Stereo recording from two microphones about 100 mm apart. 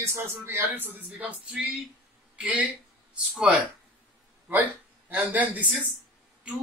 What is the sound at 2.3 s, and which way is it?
Speech, 15° right (ahead or behind).